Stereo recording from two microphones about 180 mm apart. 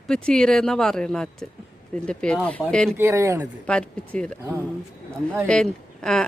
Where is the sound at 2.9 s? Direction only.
15° right (ahead or behind).